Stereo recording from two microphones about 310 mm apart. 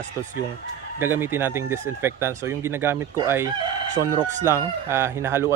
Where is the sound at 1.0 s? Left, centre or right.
Centre.